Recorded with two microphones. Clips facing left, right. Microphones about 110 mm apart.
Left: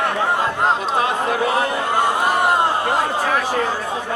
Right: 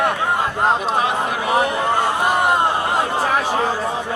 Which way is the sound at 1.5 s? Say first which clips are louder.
Right 2 dB; 15° right (ahead or behind).